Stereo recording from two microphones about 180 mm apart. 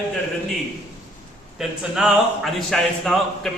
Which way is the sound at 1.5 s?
Centre (ahead or behind).